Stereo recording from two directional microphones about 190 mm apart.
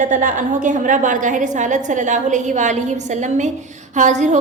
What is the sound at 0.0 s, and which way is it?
A woman's voice, 45° right (ahead or behind).